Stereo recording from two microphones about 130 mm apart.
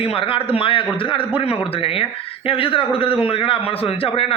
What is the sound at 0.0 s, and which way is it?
A man's voice, 45° left (ahead or behind).